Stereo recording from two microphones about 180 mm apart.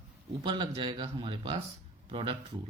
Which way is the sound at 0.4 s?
25° right (ahead or behind).